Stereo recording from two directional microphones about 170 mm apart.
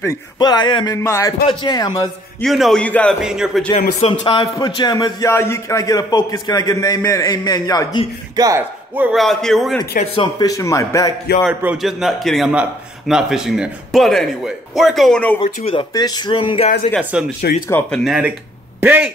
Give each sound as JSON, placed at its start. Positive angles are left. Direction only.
{"t": 0.0, "sound": "speech", "side_deg": 20}
{"t": 2.4, "sound": "speech", "side_deg": 0}
{"t": 3.2, "sound": "speech", "side_deg": -5}
{"t": 4.0, "sound": "speech", "side_deg": 30}
{"t": 8.4, "sound": "speech", "side_deg": -15}
{"t": 9.2, "sound": "speech", "side_deg": 0}
{"t": 10.1, "sound": "speech", "side_deg": 25}
{"t": 11.4, "sound": "speech", "side_deg": -5}
{"t": 15.4, "sound": "speech", "side_deg": 35}
{"t": 15.9, "sound": "speech", "side_deg": 25}
{"t": 17.1, "sound": "speech", "side_deg": -5}
{"t": 17.6, "sound": "speech", "side_deg": 10}
{"t": 18.0, "sound": "speech", "side_deg": -5}